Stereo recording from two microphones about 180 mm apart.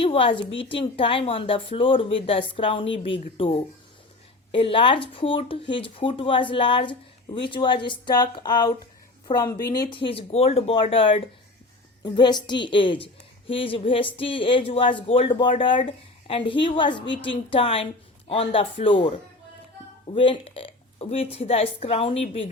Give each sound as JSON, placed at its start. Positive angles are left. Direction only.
{"t": 0.0, "sound": "a woman's voice", "side_deg": 30}